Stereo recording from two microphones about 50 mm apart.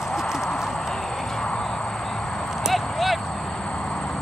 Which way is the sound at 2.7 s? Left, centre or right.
Centre.